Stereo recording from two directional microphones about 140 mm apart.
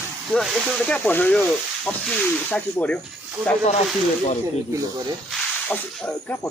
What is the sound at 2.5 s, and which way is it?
Speech, 10° left (ahead or behind).